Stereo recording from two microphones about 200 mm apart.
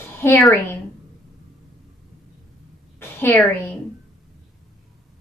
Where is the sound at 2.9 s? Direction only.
10° left (ahead or behind).